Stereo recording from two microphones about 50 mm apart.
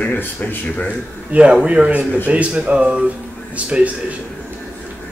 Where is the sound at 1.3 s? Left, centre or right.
Right.